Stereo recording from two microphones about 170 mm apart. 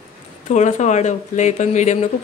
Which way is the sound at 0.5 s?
45° left (ahead or behind).